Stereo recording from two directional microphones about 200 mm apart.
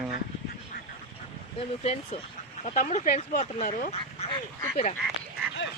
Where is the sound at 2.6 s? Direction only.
35° left (ahead or behind).